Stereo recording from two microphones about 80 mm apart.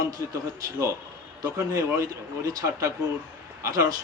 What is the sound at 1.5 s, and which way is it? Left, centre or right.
A man's voice, right.